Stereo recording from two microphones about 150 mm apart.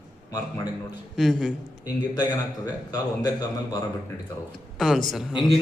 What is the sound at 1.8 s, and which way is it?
A man's voice, 25° left (ahead or behind).